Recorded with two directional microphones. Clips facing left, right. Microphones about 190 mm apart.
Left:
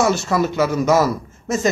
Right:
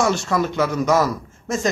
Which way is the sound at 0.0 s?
5° left (ahead or behind).